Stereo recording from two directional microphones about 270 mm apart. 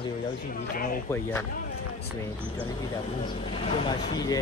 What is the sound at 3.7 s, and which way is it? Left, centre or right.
Speech, centre.